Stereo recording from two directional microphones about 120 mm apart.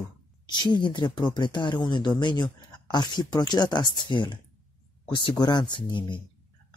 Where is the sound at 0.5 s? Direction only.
40° left (ahead or behind).